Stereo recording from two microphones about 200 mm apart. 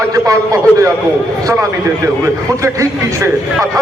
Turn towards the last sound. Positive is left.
turn(degrees=-15)  # may be behind; listen again after turning